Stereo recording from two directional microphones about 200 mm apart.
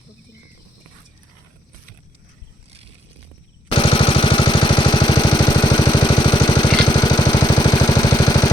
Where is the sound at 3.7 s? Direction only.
25° left (ahead or behind).